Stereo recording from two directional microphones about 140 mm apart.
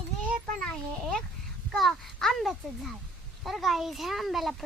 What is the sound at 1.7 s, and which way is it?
Speech, centre (ahead or behind).